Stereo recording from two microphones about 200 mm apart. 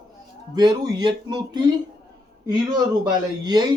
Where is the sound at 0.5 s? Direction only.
20° right (ahead or behind).